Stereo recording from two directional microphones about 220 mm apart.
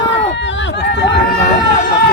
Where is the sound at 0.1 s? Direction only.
55° left (ahead or behind).